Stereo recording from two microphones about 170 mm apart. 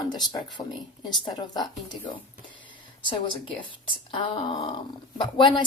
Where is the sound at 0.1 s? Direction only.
25° left (ahead or behind).